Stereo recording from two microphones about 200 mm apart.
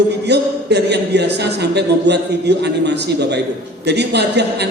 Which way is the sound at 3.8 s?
55° right (ahead or behind).